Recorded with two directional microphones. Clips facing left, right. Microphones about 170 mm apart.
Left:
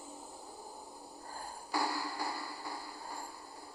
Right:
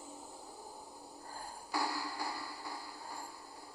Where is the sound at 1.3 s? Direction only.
60° left (ahead or behind).